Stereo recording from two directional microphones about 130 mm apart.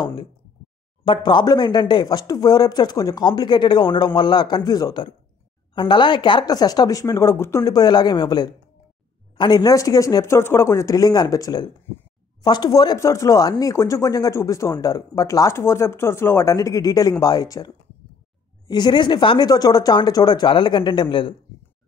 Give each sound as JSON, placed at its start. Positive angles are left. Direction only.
{"t": 0.0, "sound": "speech", "side_deg": 40}